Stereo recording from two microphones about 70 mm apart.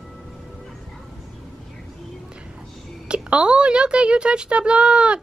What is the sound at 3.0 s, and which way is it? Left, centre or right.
Speech, centre.